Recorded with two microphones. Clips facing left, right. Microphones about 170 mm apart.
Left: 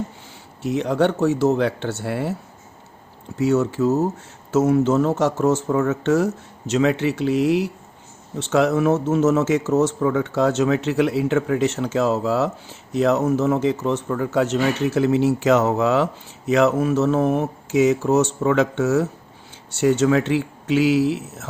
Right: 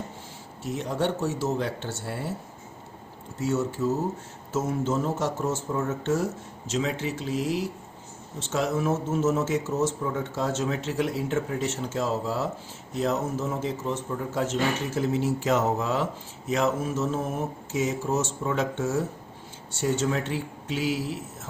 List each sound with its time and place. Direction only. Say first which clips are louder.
0.6 s speech: left 8 dB; 70° left (ahead or behind)
3.3 s speech: left 8 dB; 65° left (ahead or behind)